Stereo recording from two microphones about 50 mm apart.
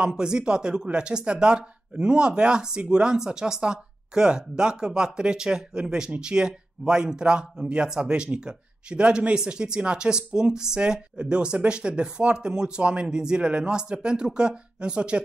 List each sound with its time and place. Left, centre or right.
0.0 s speech: centre